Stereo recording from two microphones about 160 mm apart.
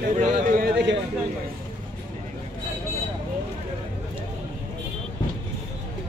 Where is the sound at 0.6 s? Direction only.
90° right.